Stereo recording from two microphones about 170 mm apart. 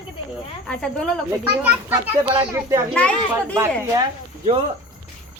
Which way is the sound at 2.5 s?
15° right (ahead or behind).